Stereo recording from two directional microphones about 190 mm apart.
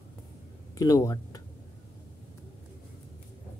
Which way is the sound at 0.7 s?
20° left (ahead or behind).